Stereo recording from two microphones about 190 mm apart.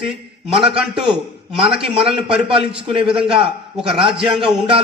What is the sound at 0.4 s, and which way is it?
Speech, 30° right (ahead or behind).